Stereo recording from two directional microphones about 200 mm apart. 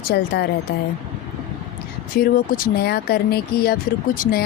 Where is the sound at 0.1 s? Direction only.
55° left (ahead or behind).